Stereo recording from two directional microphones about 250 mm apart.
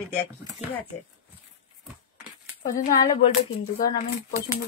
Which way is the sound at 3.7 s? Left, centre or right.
Left.